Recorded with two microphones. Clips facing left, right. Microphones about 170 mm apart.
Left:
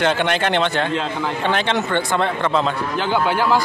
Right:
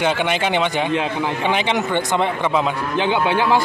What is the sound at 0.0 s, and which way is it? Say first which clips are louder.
Speech: left 1 dB; 10° right (ahead or behind).